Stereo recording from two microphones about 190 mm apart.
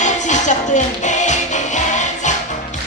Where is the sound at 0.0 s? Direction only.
40° left (ahead or behind).